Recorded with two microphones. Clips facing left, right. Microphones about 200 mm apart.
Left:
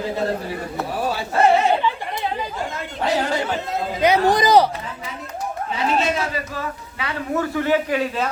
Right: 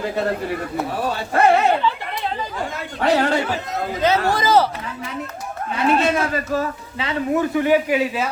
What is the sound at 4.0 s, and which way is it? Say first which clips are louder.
Speech: left 3 dB; 15° left (ahead or behind).